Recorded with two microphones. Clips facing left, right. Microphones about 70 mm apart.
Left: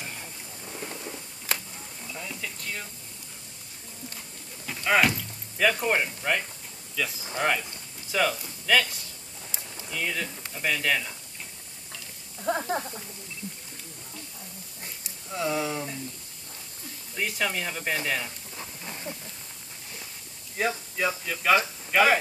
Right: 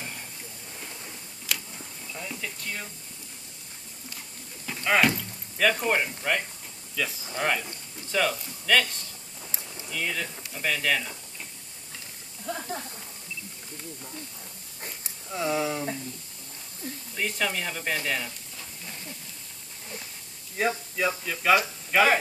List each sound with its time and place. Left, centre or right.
1.5 s a sound: left
2.1 s speech: centre
4.8 s speech: centre
12.4 s speech: left
15.2 s speech: centre
17.1 s speech: centre
18.6 s hiss: left
20.5 s speech: centre